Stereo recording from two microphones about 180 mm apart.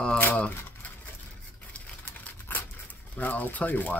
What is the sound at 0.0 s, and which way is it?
Speech, 10° left (ahead or behind).